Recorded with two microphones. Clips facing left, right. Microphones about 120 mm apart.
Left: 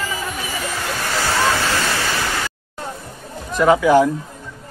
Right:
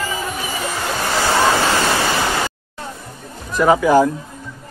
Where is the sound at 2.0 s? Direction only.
20° right (ahead or behind).